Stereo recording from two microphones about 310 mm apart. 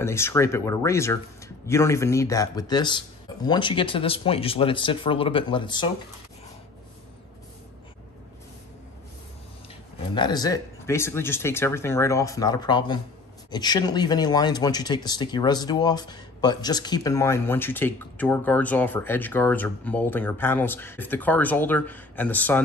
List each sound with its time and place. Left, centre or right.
0.0 s speech: centre
10.1 s speech: centre